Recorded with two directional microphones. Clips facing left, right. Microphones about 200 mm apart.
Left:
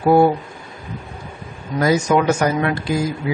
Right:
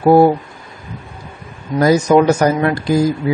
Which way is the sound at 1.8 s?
40° right (ahead or behind).